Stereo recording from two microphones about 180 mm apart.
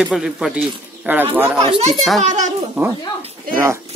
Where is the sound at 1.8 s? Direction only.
35° right (ahead or behind).